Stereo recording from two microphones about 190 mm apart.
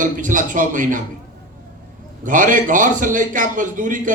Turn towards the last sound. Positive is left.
turn(degrees=-45)  # may be behind; listen again after turning